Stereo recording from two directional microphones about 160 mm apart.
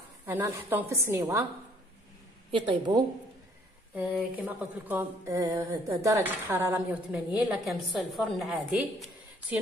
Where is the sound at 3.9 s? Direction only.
10° right (ahead or behind).